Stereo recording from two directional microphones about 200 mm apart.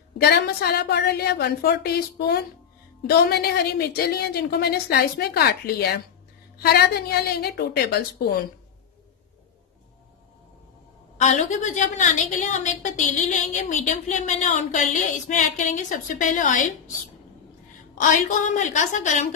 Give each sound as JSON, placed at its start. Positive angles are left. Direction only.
{"t": 0.2, "sound": "a woman's voice", "side_deg": 50}
{"t": 11.1, "sound": "a woman's voice", "side_deg": 35}
{"t": 17.9, "sound": "a woman's voice", "side_deg": 40}